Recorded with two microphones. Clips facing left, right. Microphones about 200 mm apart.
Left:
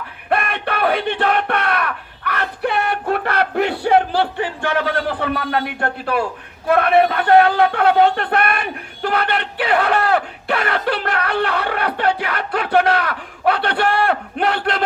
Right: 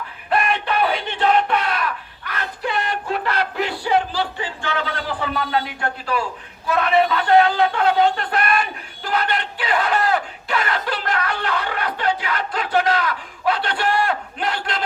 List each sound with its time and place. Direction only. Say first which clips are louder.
0.3 s battle cry: even; 60° left (ahead or behind)
6.7 s speech: left 4 dB; 60° left (ahead or behind)